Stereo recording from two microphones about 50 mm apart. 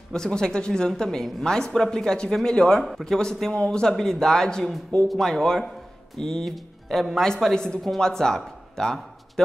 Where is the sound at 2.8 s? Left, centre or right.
Centre.